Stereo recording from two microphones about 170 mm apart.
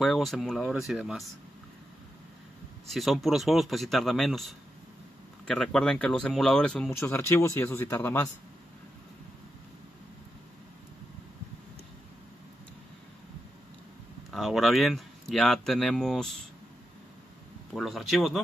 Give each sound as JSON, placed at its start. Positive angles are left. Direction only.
{"t": 0.0, "sound": "speech", "side_deg": 0}
{"t": 2.9, "sound": "speech", "side_deg": 0}
{"t": 14.3, "sound": "speech", "side_deg": 0}
{"t": 17.7, "sound": "speech", "side_deg": 0}